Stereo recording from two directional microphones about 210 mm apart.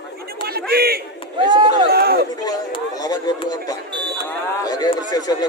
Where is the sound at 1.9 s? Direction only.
50° right (ahead or behind).